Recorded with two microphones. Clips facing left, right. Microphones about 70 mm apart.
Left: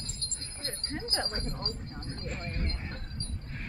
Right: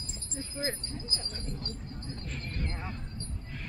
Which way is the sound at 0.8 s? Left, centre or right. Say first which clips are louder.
Left 6 dB; left.